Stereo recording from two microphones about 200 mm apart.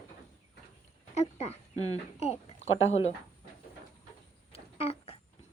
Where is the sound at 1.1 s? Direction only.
30° left (ahead or behind).